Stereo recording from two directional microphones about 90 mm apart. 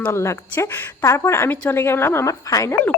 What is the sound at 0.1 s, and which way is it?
Speech, 30° left (ahead or behind).